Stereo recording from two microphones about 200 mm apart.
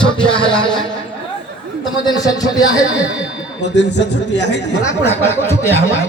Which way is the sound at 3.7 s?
60° left (ahead or behind).